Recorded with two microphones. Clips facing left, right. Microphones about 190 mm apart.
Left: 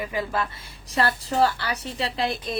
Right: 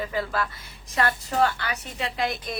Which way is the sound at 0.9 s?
35° left (ahead or behind).